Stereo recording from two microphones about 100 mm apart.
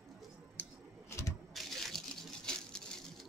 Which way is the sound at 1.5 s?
5° left (ahead or behind).